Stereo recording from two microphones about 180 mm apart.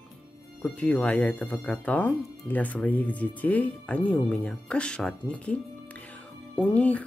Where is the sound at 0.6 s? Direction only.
5° left (ahead or behind).